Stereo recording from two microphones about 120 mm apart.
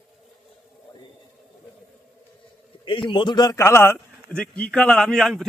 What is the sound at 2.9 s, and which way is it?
A man's voice, 45° left (ahead or behind).